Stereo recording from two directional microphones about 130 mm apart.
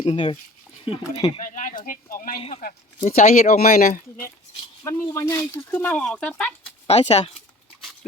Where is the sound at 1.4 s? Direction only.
90° left.